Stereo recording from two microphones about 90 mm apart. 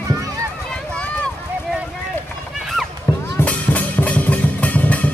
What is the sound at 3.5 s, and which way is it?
Music, 15° left (ahead or behind).